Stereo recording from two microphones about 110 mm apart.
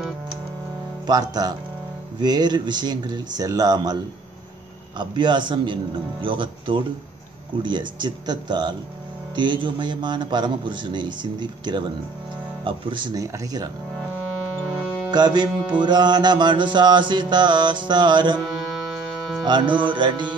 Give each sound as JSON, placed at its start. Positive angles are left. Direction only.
{"t": 1.0, "sound": "a man's voice", "side_deg": -35}
{"t": 13.2, "sound": "speech", "side_deg": -30}
{"t": 15.0, "sound": "a man's voice", "side_deg": -40}
{"t": 19.4, "sound": "a man's voice", "side_deg": -45}